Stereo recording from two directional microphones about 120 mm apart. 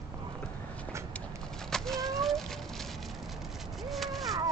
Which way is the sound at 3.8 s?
Centre (ahead or behind).